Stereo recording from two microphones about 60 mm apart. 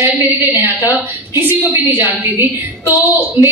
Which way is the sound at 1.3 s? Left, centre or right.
Right.